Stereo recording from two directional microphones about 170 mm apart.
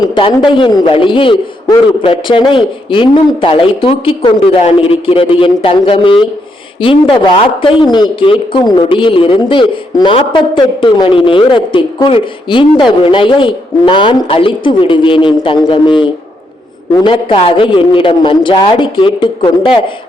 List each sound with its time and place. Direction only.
0.0 s a man's voice: 30° left (ahead or behind)